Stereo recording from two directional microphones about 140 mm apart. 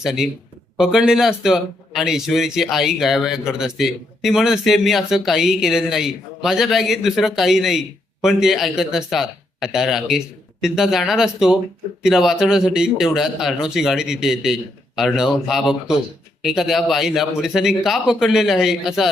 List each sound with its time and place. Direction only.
0.0 s a man's voice: 5° right (ahead or behind)